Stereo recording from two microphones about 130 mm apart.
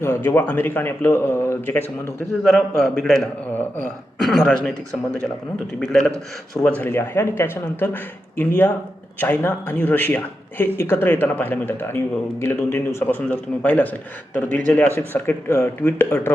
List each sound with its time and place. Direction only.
0.0 s speech: 20° left (ahead or behind)
2.4 s speech: centre (ahead or behind)
3.5 s speech: 15° left (ahead or behind)
4.2 s speech: centre (ahead or behind)
6.8 s speech: 15° left (ahead or behind)
16.0 s speech: 10° left (ahead or behind)